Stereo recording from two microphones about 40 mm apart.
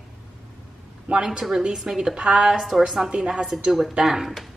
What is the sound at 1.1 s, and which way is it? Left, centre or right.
A woman's voice, centre.